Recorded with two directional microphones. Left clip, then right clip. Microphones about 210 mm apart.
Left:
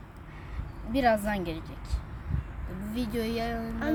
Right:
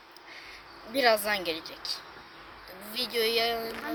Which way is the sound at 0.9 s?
5° right (ahead or behind).